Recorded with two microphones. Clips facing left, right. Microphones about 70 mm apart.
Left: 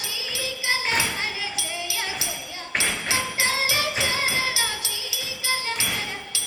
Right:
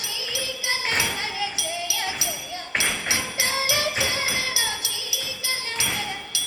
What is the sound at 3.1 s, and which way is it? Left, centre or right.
Music, left.